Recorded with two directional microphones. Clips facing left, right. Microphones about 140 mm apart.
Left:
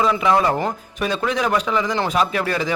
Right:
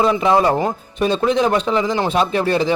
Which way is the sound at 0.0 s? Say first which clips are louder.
Right 3 dB; 25° right (ahead or behind).